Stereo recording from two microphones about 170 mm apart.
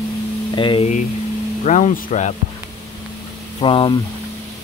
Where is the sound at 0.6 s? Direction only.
30° left (ahead or behind).